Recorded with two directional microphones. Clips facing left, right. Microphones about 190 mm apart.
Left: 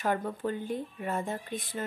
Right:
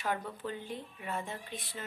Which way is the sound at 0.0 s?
50° left (ahead or behind).